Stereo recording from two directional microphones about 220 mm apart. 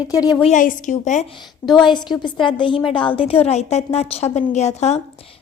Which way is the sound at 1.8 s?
20° left (ahead or behind).